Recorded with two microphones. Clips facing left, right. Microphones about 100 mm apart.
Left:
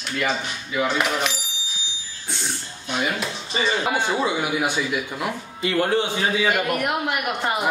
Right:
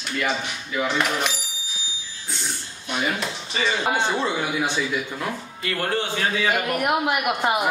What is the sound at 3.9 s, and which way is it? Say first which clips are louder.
Speech: left 1 dB; 10° left (ahead or behind).